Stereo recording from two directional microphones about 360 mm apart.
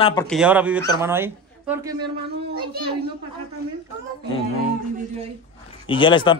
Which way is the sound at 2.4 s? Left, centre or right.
Right.